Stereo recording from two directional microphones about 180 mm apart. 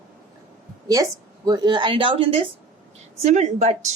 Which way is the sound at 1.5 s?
25° right (ahead or behind).